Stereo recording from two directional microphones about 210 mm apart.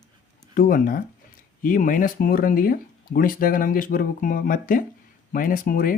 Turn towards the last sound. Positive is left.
turn(degrees=40)  # may be behind; listen again after turning